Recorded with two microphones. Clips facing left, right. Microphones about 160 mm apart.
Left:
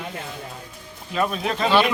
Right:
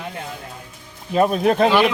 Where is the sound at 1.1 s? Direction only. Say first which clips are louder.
Right 7 dB; 40° right (ahead or behind).